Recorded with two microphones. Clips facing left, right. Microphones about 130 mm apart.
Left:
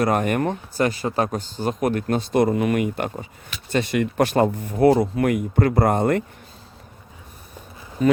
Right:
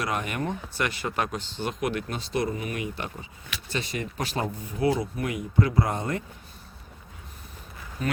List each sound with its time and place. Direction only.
0.0 s speech: 50° left (ahead or behind)
2.6 s speech: 90° left
2.9 s speech: 50° left (ahead or behind)